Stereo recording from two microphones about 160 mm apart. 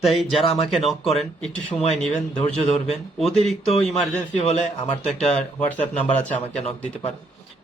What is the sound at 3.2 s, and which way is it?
Speech, centre (ahead or behind).